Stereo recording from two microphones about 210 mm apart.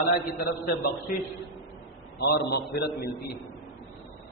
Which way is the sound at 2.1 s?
50° left (ahead or behind).